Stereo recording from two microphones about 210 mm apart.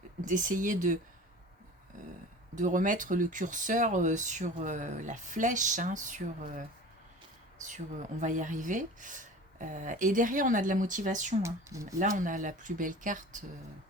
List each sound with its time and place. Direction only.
0.3 s speech: 40° right (ahead or behind)
2.6 s speech: 40° right (ahead or behind)
8.2 s speech: 35° right (ahead or behind)
11.4 s speech: 15° right (ahead or behind)
11.9 s speech: 40° right (ahead or behind)